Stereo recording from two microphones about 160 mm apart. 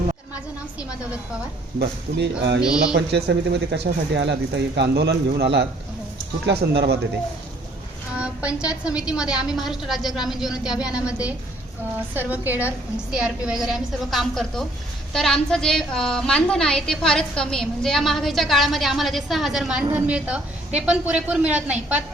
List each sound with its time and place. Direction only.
1.8 s speech: 90° right
8.1 s a sound: 5° right (ahead or behind)
8.7 s a woman's voice: 5° right (ahead or behind)
11.9 s a woman's voice: 10° right (ahead or behind)